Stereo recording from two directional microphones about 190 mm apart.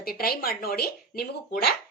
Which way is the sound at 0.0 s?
50° left (ahead or behind).